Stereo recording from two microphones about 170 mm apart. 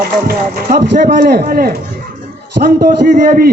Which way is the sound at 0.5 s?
75° right (ahead or behind).